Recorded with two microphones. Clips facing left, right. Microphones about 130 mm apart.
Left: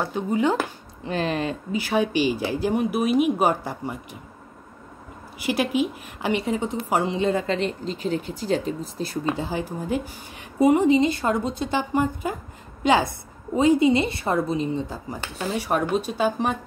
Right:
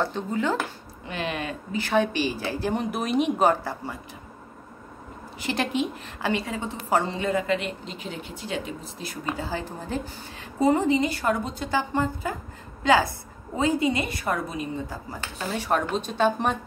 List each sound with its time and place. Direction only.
0.0 s speech: 15° left (ahead or behind)
1.0 s speech: 35° left (ahead or behind)
1.7 s speech: 10° left (ahead or behind)
5.4 s speech: 10° left (ahead or behind)
6.2 s speech: 20° left (ahead or behind)
7.2 s speech: 30° left (ahead or behind)
9.2 s a woman's voice: 20° left (ahead or behind)